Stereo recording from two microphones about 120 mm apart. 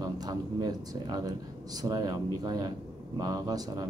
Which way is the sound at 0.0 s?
35° right (ahead or behind).